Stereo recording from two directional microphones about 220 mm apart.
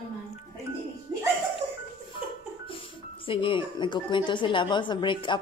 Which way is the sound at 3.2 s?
25° left (ahead or behind).